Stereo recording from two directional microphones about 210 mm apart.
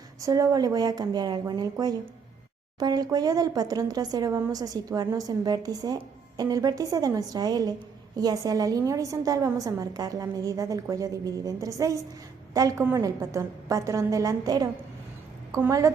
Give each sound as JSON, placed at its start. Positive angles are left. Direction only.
{"t": 0.2, "sound": "speech", "side_deg": -15}